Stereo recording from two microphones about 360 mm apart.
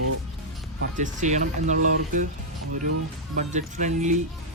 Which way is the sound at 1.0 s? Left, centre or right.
Centre.